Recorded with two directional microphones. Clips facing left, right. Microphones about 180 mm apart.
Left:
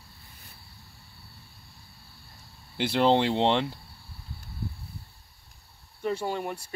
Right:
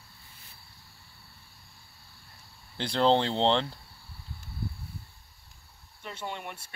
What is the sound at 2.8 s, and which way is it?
Speech, 10° left (ahead or behind).